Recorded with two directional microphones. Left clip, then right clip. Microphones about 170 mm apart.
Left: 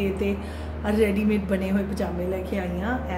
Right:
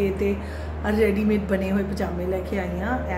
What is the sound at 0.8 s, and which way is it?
A woman's voice, centre (ahead or behind).